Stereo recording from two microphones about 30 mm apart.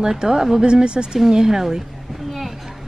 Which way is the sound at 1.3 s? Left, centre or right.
Centre.